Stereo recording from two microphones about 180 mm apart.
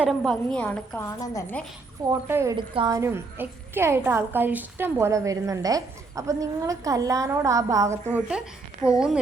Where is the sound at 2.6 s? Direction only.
25° right (ahead or behind).